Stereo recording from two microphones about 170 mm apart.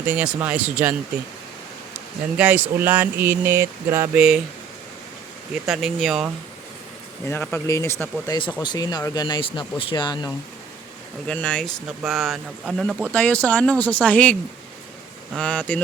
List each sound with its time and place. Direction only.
0.0 s speech: 10° right (ahead or behind)
2.4 s speech: 10° right (ahead or behind)
5.6 s speech: centre (ahead or behind)
7.3 s speech: 10° left (ahead or behind)
11.3 s speech: 5° left (ahead or behind)
15.4 s speech: 5° left (ahead or behind)